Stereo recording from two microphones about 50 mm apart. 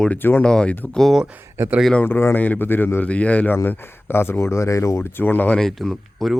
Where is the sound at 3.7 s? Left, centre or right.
Left.